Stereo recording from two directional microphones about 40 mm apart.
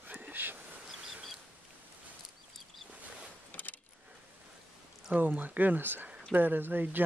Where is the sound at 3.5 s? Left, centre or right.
Left.